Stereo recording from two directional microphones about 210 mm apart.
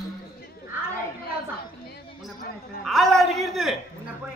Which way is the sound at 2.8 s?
Centre (ahead or behind).